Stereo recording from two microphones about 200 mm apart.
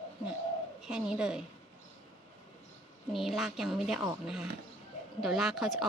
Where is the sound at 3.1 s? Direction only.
Centre (ahead or behind).